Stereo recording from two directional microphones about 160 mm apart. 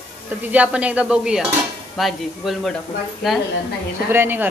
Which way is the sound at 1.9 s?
Centre (ahead or behind).